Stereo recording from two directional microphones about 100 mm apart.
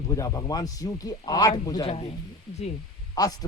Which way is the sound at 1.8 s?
80° left.